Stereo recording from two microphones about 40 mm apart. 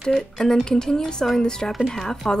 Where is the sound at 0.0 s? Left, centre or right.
Centre.